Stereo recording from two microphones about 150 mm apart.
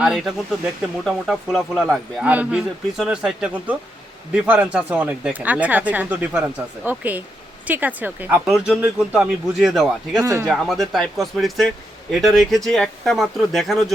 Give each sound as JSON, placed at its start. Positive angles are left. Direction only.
{"t": 0.0, "sound": "speech", "side_deg": -5}
{"t": 10.2, "sound": "speech", "side_deg": -20}
{"t": 10.4, "sound": "speech", "side_deg": 0}